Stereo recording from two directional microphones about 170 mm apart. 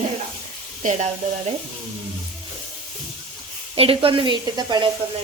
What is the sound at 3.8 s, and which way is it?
Speech, 30° right (ahead or behind).